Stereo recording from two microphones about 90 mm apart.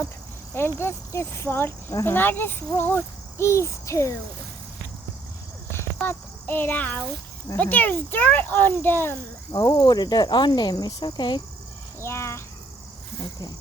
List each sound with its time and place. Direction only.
0.8 s speech: 30° left (ahead or behind)
3.4 s a sound: 30° left (ahead or behind)
6.0 s speech: 20° left (ahead or behind)
9.5 s cricket: 45° left (ahead or behind)
12.0 s insect: 30° left (ahead or behind)